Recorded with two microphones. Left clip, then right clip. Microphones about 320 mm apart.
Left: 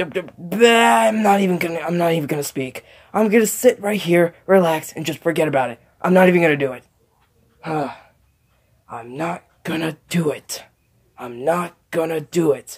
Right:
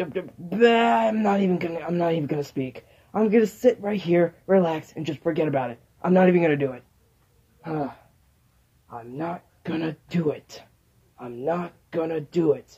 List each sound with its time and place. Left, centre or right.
0.0 s speech: left